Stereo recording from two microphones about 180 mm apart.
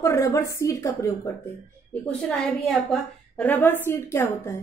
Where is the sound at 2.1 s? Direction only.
5° left (ahead or behind).